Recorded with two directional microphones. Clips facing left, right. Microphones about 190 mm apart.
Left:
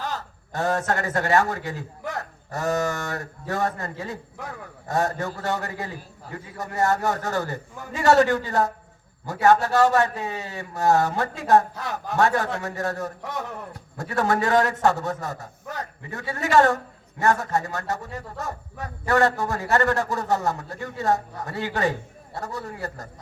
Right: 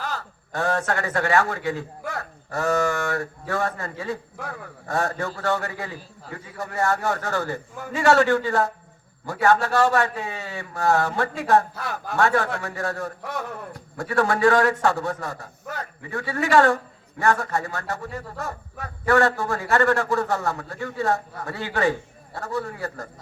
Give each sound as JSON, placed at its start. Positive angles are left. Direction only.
{"t": 0.0, "sound": "a man's voice", "side_deg": 20}